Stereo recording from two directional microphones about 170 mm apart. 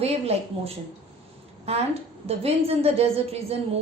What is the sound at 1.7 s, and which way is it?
A woman's voice, 35° right (ahead or behind).